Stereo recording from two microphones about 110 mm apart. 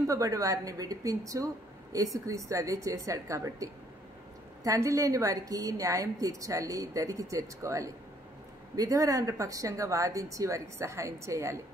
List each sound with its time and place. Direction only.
0.0 s speech: 30° right (ahead or behind)